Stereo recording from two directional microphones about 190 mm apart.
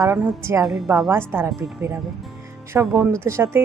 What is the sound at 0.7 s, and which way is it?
Speech, centre (ahead or behind).